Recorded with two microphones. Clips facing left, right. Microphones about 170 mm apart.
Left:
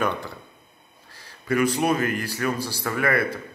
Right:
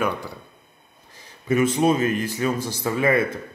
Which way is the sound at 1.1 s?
20° right (ahead or behind).